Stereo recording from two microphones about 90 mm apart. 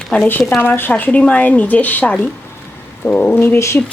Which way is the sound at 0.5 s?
25° left (ahead or behind).